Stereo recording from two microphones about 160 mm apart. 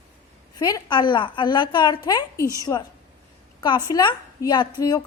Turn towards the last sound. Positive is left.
turn(degrees=25)  # may be behind; listen again after turning